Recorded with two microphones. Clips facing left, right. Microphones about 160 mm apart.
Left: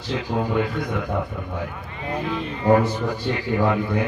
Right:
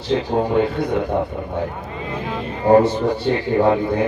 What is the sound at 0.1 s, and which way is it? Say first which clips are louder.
Speech: right 6 dB; 30° right (ahead or behind).